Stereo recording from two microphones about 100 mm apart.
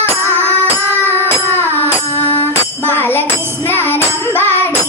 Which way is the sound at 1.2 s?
20° left (ahead or behind).